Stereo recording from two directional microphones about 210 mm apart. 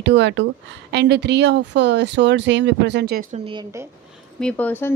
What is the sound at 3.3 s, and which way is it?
Speech, 25° right (ahead or behind).